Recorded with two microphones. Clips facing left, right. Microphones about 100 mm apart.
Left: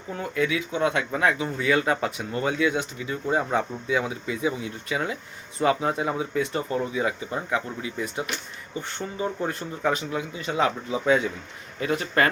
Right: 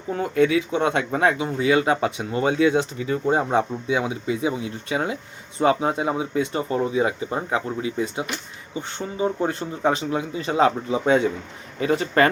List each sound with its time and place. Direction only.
0.1 s speech: 35° right (ahead or behind)
1.4 s speech: 20° right (ahead or behind)
9.4 s speech: 30° right (ahead or behind)